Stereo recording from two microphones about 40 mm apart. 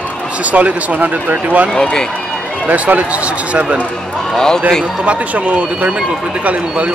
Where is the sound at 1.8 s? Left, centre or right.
Left.